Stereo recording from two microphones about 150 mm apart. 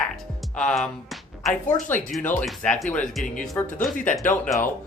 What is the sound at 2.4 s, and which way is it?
Speech, centre (ahead or behind).